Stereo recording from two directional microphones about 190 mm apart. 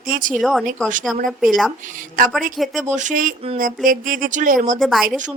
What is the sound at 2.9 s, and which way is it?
Speech, 40° right (ahead or behind).